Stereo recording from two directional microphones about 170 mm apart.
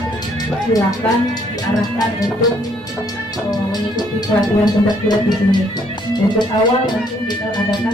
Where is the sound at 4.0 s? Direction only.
25° left (ahead or behind).